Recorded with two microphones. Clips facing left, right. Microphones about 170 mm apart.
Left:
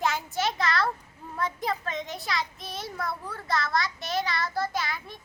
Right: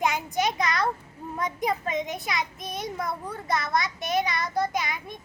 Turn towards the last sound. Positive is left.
turn(degrees=-15)  # may be behind; listen again after turning